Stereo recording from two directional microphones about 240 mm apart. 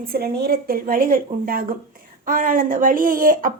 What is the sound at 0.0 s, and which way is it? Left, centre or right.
Speech, right.